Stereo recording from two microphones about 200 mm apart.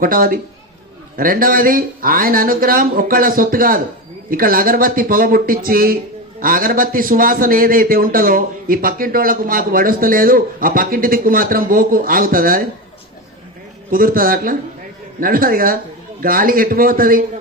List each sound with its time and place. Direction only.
0.0 s a man's voice: 45° right (ahead or behind)
13.9 s a man's voice: 45° right (ahead or behind)